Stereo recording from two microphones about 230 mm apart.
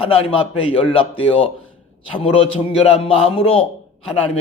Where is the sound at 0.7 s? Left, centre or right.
Left.